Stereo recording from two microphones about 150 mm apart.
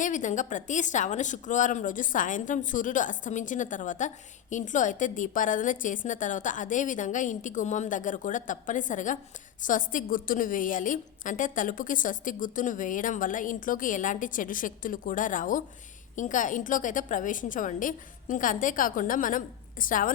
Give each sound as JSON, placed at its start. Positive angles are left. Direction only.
{"t": 0.0, "sound": "speech", "side_deg": 55}